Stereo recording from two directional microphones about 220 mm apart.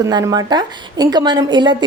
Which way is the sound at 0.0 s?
15° right (ahead or behind).